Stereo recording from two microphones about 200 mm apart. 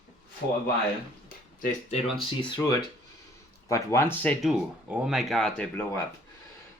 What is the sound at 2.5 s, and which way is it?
Speech, 15° left (ahead or behind).